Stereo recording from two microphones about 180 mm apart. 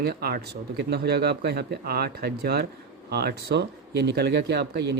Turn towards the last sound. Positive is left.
turn(degrees=-70)  # may be behind; listen again after turning